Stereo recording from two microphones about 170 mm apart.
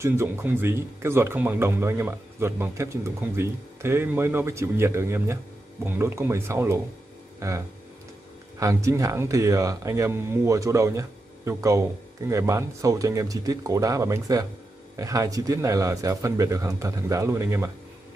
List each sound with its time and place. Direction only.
0.0 s speech: 15° right (ahead or behind)